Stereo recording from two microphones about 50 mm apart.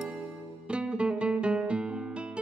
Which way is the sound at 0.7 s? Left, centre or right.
Right.